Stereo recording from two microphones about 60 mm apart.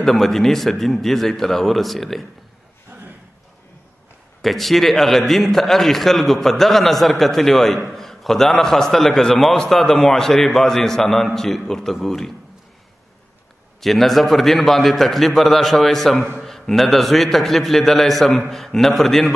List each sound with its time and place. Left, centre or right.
0.0 s a man's voice: centre
2.9 s a sound: right
4.4 s a man's voice: centre
13.7 s a man's voice: centre